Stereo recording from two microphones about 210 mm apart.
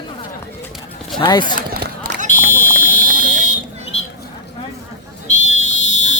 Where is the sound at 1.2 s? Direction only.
20° left (ahead or behind).